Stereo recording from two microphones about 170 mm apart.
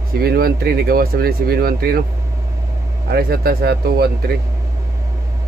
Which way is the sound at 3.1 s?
65° right (ahead or behind).